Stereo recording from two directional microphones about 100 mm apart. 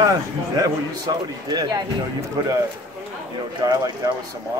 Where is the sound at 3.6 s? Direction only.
40° right (ahead or behind).